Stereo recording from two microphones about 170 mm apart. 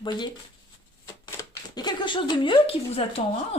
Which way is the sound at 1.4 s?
20° left (ahead or behind).